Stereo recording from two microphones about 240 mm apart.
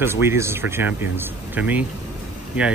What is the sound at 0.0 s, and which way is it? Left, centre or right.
Speech, centre.